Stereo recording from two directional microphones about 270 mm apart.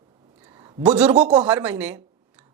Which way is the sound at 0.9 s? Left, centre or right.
Centre.